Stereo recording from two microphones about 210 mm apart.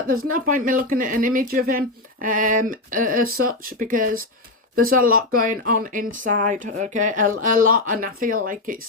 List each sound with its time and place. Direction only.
0.3 s a woman's voice: 40° right (ahead or behind)